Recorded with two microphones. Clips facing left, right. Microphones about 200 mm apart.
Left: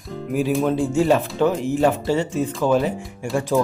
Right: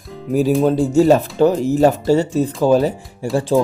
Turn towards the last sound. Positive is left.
turn(degrees=-35)  # may be behind; listen again after turning